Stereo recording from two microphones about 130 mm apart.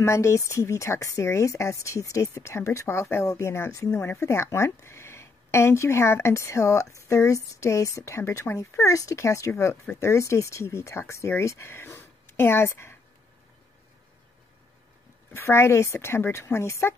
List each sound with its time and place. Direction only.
0.0 s speech: 20° left (ahead or behind)
15.3 s speech: 20° left (ahead or behind)